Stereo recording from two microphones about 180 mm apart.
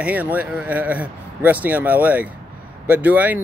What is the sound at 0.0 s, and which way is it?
Speech, 10° right (ahead or behind).